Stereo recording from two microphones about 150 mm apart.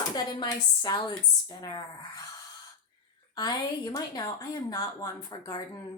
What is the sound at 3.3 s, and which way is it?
Speech, 25° left (ahead or behind).